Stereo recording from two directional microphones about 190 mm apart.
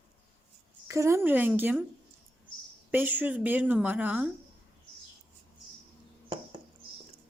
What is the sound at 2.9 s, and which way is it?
Speech, 10° right (ahead or behind).